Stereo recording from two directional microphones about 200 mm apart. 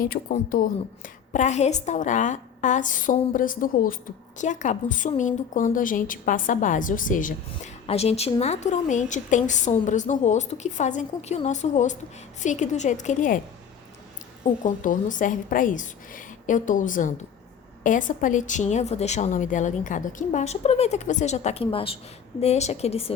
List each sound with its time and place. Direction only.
0.0 s a woman's voice: 45° left (ahead or behind)
14.4 s a woman's voice: 40° left (ahead or behind)